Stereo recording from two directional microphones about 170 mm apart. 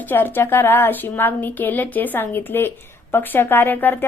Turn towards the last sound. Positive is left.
turn(degrees=10)  # may be behind; listen again after turning